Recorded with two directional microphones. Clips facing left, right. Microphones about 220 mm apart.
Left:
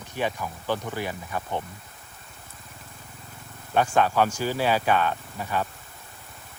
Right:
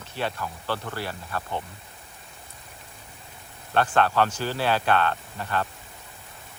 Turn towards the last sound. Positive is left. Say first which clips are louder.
# even
turn(degrees=10)  # may be behind; listen again after turning